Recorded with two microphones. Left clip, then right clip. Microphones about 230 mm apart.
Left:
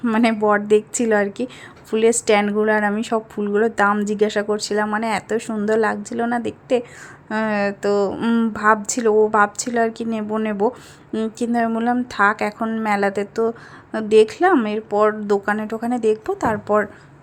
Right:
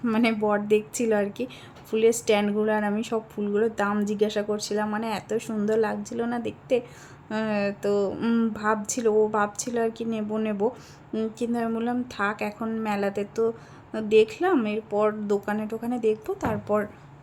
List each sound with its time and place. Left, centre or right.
0.0 s speech: centre